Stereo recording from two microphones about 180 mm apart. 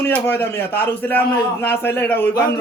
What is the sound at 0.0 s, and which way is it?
A man's voice, 10° left (ahead or behind).